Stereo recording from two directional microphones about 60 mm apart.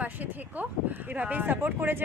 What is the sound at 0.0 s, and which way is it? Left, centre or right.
Speech, right.